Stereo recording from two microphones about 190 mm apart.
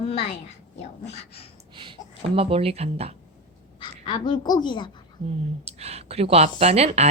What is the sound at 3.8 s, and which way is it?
A woman's voice, 25° left (ahead or behind).